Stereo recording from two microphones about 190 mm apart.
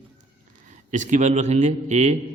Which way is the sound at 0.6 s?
40° right (ahead or behind).